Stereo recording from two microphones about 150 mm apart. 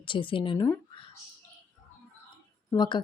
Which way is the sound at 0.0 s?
35° left (ahead or behind).